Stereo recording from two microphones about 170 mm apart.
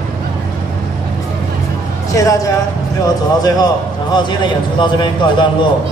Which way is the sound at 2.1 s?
20° left (ahead or behind).